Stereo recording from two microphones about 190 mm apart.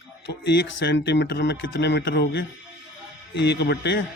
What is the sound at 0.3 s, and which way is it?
Speech, 65° left (ahead or behind).